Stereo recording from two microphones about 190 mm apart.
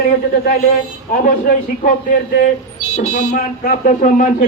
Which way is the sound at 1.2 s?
45° left (ahead or behind).